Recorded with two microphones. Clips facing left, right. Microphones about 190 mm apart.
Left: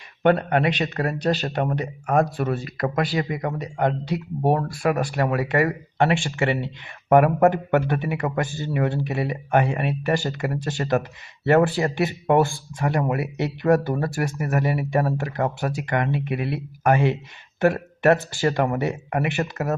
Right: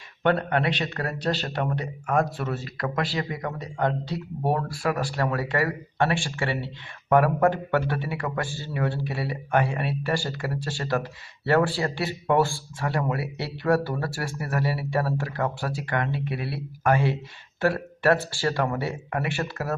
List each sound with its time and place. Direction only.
0.2 s speech: 15° left (ahead or behind)
2.0 s speech: 40° left (ahead or behind)
3.2 s speech: 15° left (ahead or behind)